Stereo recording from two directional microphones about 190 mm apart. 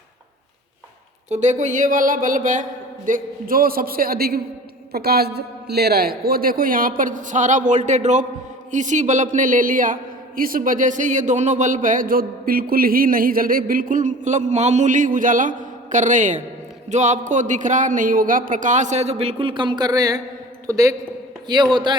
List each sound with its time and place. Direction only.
1.3 s a man's voice: 40° right (ahead or behind); by 21.9 s 25° right (ahead or behind)